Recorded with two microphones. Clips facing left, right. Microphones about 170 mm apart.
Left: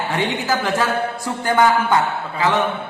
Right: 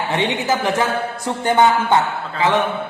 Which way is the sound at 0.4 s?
20° right (ahead or behind).